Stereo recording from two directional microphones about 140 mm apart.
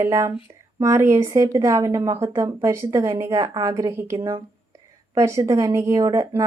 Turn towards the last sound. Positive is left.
turn(degrees=-20)  # may be behind; listen again after turning